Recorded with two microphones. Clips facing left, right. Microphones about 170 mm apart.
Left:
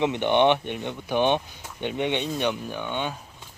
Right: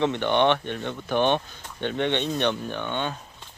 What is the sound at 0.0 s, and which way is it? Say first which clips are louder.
Speech: left 1 dB; 15° left (ahead or behind).